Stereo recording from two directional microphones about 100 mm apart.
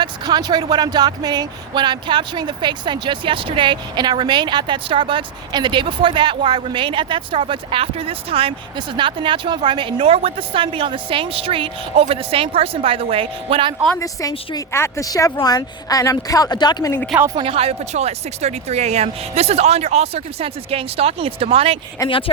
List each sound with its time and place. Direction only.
0.0 s speech: 45° right (ahead or behind); by 8.5 s 70° right (ahead or behind)
9.0 s speech: 55° right (ahead or behind)
10.0 s a woman's voice: 75° right (ahead or behind)
14.0 s speech: 35° left (ahead or behind)
17.3 s speech: 65° right (ahead or behind)
22.0 s speech: 35° left (ahead or behind)